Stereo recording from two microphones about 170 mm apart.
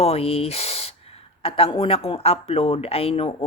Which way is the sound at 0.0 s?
35° left (ahead or behind).